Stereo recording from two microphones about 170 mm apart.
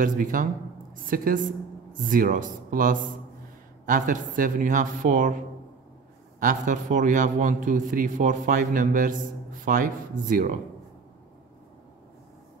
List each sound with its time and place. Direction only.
0.0 s a man's voice: 55° right (ahead or behind)
6.4 s a man's voice: 50° right (ahead or behind)